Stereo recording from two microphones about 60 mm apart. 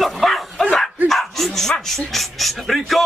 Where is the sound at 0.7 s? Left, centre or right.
Centre.